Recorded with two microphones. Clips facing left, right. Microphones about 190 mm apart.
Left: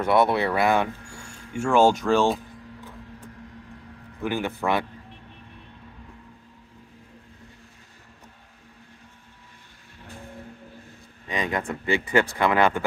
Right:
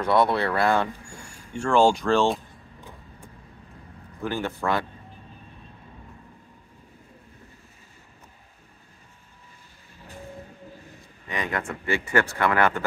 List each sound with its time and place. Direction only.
0.0 s speech: 20° left (ahead or behind); by 2.4 s centre (ahead or behind)
4.2 s speech: 15° left (ahead or behind)
11.2 s speech: 15° left (ahead or behind)